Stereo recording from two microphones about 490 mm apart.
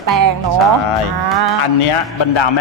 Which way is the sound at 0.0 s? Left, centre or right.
Right.